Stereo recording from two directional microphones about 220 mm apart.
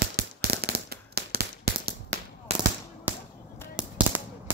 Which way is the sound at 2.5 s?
30° right (ahead or behind).